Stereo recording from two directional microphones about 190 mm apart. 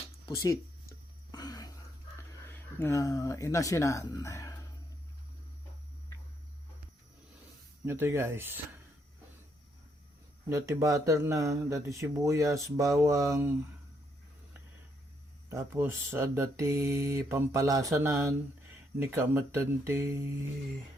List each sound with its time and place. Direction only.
0.3 s speech: 15° left (ahead or behind)
1.3 s a sound: 20° left (ahead or behind)
2.5 s speech: 10° left (ahead or behind)
7.9 s speech: 10° right (ahead or behind)
10.5 s speech: 15° right (ahead or behind)
15.4 s speech: 15° right (ahead or behind)